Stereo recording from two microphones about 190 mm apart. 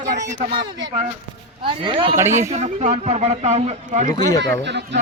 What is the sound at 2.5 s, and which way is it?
Speech, 35° right (ahead or behind).